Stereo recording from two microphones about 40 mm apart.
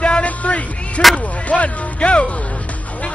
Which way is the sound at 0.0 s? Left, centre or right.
Left.